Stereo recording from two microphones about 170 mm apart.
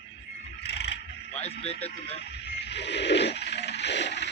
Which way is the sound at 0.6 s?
85° left.